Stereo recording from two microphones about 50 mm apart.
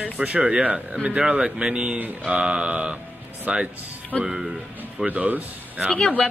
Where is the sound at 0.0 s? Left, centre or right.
Centre.